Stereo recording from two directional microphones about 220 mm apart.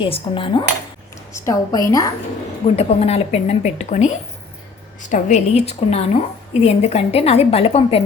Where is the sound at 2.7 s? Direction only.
30° left (ahead or behind).